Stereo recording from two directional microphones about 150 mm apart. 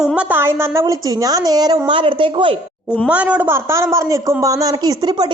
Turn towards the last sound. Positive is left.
turn(degrees=-30)  # may be behind; listen again after turning